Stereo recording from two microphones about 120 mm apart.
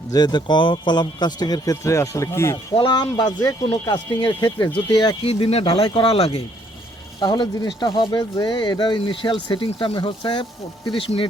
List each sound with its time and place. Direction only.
0.1 s speech: 35° left (ahead or behind)
2.7 s speech: 40° left (ahead or behind)
5.2 s speech: 55° left (ahead or behind)
7.2 s speech: 35° left (ahead or behind)